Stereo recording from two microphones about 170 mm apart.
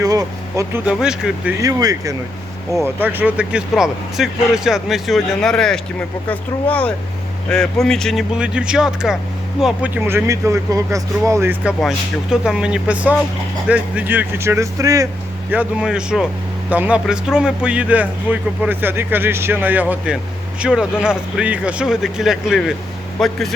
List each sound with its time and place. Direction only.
0.0 s speech: 20° right (ahead or behind)
0.9 s speech: 5° right (ahead or behind)
1.6 s a man's voice: 20° right (ahead or behind)
11.8 s a man's voice: 5° right (ahead or behind); by 15.0 s 20° right (ahead or behind)
15.4 s a man's voice: 5° right (ahead or behind)